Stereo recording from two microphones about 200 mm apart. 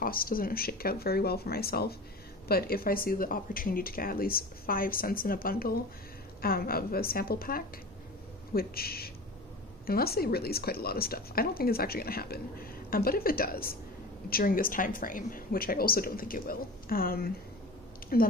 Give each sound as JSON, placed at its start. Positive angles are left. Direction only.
{"t": 0.0, "sound": "speech", "side_deg": 45}